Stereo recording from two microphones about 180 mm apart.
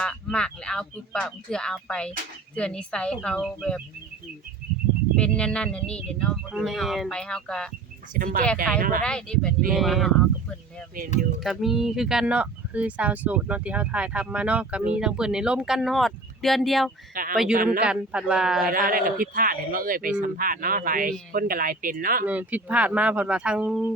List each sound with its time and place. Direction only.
0.0 s speech: 5° left (ahead or behind)
5.1 s speech: 5° left (ahead or behind)
8.1 s speech: 50° right (ahead or behind)
9.0 s speech: 5° left (ahead or behind)
11.4 s speech: centre (ahead or behind)
17.2 s a man's voice: 50° right (ahead or behind)
17.8 s speech: 5° right (ahead or behind)
18.6 s speech: 50° right (ahead or behind)
22.3 s speech: 10° right (ahead or behind)